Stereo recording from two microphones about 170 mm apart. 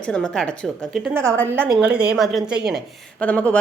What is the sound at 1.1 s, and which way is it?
A woman's voice, 15° right (ahead or behind).